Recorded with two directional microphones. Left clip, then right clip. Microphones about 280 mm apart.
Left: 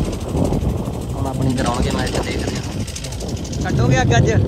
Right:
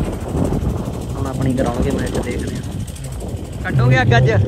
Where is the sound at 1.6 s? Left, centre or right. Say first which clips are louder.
Right 1 dB; right.